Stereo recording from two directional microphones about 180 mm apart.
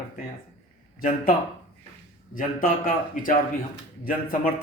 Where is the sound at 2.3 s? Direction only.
50° left (ahead or behind).